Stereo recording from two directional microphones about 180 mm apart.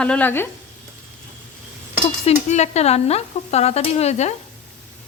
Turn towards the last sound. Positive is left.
turn(degrees=40)  # may be behind; listen again after turning